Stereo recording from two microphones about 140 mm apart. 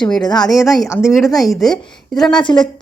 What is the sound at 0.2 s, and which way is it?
Speech, 30° left (ahead or behind).